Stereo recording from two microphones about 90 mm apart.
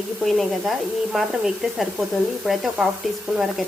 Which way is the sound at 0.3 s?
Centre (ahead or behind).